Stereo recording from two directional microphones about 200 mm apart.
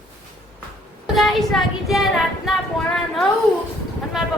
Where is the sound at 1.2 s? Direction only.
Centre (ahead or behind).